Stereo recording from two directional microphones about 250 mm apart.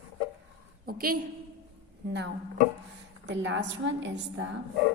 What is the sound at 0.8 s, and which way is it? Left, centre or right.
A woman's voice, right.